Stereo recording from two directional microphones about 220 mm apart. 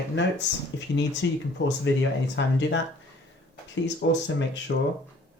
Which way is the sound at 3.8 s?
55° left (ahead or behind).